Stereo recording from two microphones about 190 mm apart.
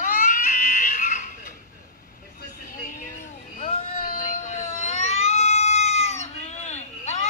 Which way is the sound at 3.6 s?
30° left (ahead or behind).